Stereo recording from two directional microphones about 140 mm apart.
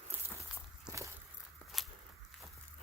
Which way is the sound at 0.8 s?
20° right (ahead or behind).